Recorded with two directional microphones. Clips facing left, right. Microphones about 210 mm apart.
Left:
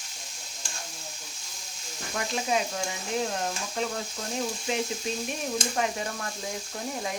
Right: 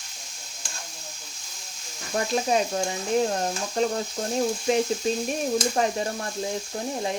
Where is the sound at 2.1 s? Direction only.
40° right (ahead or behind).